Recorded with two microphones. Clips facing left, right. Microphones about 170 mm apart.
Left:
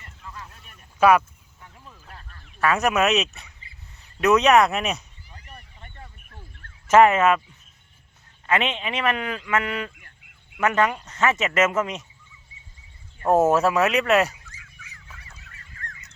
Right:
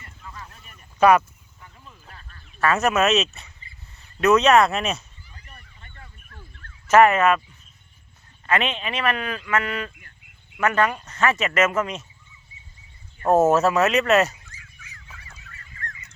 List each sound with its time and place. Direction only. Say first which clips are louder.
0.9 s speech: right 1 dB; 5° left (ahead or behind)
2.6 s speech: right 1 dB; 15° left (ahead or behind)
5.5 s a sound: left 6 dB; 15° left (ahead or behind)
6.9 s a man's voice: even; 25° left (ahead or behind)
8.4 s a man's voice: even; 20° left (ahead or behind)
13.2 s speech: right 1 dB; 10° left (ahead or behind)